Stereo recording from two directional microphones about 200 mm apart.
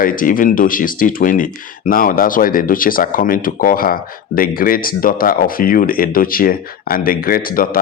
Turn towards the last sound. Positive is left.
turn(degrees=45)  # may be behind; listen again after turning